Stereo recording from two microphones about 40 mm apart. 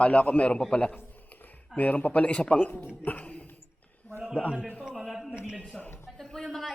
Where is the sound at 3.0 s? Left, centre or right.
Left.